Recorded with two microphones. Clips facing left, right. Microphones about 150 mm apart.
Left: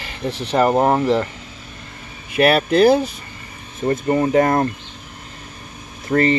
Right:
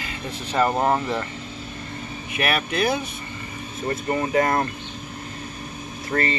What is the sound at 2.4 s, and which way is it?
Speech, 35° left (ahead or behind).